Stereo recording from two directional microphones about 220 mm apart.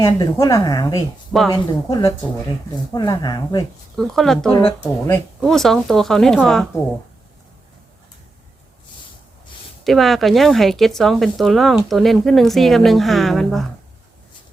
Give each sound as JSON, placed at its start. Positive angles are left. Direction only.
{"t": 0.0, "sound": "a woman's voice", "side_deg": 15}
{"t": 3.9, "sound": "a woman's voice", "side_deg": 0}
{"t": 5.4, "sound": "speech", "side_deg": 0}
{"t": 9.8, "sound": "speech", "side_deg": 0}